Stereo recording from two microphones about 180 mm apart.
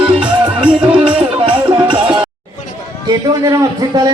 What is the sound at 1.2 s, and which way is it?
Music, 30° right (ahead or behind).